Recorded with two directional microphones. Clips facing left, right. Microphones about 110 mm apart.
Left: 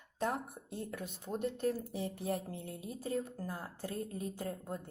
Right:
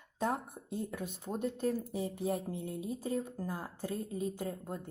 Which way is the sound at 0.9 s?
15° right (ahead or behind).